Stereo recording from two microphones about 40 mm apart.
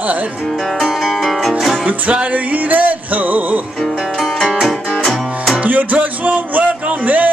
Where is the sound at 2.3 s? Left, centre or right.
Right.